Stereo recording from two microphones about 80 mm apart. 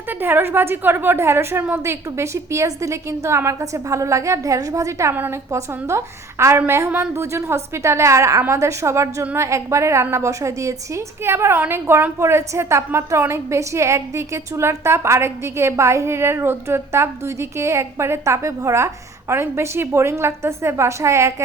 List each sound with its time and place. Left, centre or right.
0.2 s a woman's voice: right